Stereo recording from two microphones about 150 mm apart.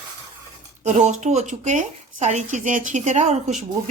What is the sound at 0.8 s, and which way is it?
Speech, 50° right (ahead or behind).